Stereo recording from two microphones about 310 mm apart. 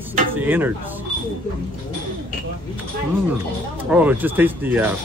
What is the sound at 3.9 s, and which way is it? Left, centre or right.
Speech, centre.